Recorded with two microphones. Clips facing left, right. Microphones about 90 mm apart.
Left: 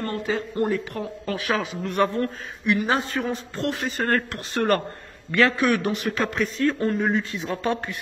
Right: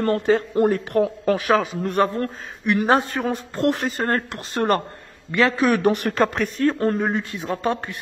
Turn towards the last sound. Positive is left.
turn(degrees=-35)  # may be behind; listen again after turning